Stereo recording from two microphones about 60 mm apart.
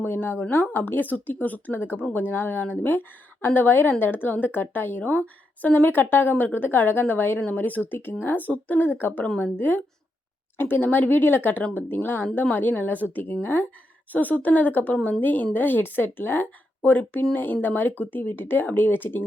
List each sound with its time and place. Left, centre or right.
0.0 s a woman's voice: left